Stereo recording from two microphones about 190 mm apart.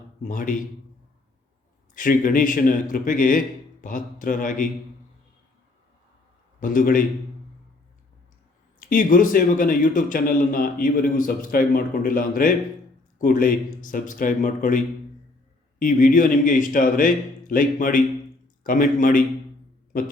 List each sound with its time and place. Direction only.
0.2 s speech: 45° left (ahead or behind)
2.0 s speech: 45° left (ahead or behind)
6.6 s speech: 45° left (ahead or behind)
8.9 s speech: 45° left (ahead or behind)
15.8 s a man's voice: 45° left (ahead or behind)